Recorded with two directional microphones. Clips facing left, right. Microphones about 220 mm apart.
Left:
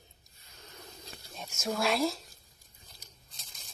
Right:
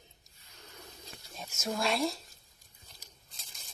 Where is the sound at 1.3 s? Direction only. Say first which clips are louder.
Left 2 dB; centre (ahead or behind).